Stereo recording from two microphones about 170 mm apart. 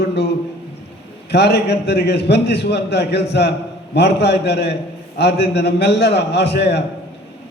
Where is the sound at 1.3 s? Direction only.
75° left (ahead or behind).